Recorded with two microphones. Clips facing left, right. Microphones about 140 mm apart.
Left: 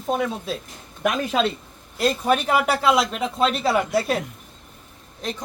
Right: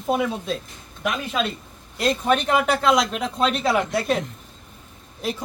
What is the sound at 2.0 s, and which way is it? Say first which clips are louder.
A woman's voice: even; 5° left (ahead or behind).